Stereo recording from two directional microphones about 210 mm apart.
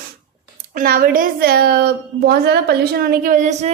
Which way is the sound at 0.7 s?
45° right (ahead or behind).